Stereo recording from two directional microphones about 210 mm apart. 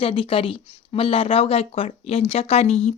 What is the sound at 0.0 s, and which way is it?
Speech, 25° left (ahead or behind).